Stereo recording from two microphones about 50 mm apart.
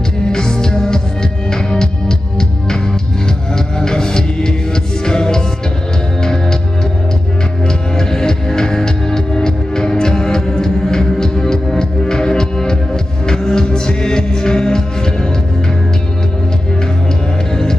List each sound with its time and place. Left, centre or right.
0.3 s music: centre
7.6 s music: centre